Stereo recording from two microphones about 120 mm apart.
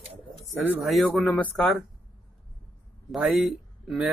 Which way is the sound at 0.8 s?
Centre (ahead or behind).